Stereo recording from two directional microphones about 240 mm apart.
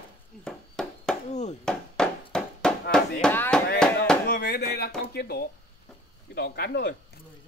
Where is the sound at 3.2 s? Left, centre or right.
Centre.